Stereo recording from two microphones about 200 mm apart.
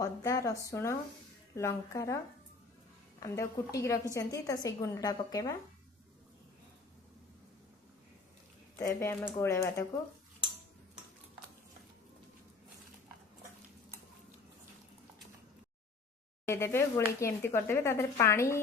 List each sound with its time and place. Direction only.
0.0 s speech: 15° left (ahead or behind)
3.2 s speech: 15° left (ahead or behind)
8.7 s speech: 15° left (ahead or behind)
16.5 s speech: 15° left (ahead or behind)